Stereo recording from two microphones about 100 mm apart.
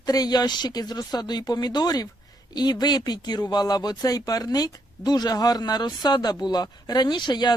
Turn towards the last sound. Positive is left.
turn(degrees=45)  # may be behind; listen again after turning